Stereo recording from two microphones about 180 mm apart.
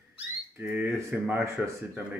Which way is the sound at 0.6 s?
10° right (ahead or behind).